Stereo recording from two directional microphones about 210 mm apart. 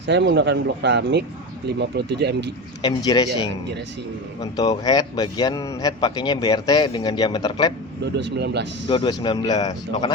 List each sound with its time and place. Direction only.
0.0 s speech: 55° right (ahead or behind)
2.8 s speech: 20° left (ahead or behind)
8.0 s speech: 55° right (ahead or behind)
8.9 s speech: 20° left (ahead or behind)